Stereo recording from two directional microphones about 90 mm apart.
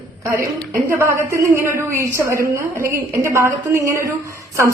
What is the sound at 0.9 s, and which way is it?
A woman's voice, 25° right (ahead or behind).